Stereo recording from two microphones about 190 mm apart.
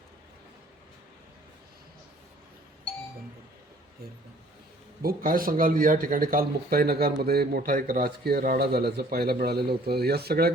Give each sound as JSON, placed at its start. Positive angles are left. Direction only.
{"t": 5.0, "sound": "speech", "side_deg": -50}